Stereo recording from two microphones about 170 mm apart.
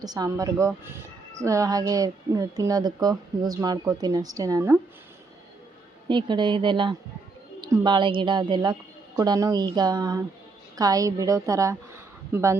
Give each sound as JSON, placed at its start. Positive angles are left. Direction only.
{"t": 0.0, "sound": "a woman's voice", "side_deg": -20}
{"t": 6.1, "sound": "a woman's voice", "side_deg": -25}